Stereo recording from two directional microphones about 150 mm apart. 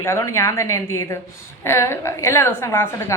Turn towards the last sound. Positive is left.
turn(degrees=15)  # may be behind; listen again after turning